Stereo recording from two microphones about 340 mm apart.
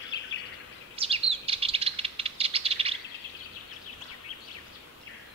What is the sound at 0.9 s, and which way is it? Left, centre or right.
Bird, centre.